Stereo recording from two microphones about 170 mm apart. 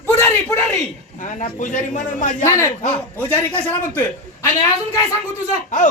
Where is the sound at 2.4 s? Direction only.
15° left (ahead or behind).